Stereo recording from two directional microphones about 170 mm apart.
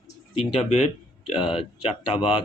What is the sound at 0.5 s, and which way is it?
Speech, 40° left (ahead or behind).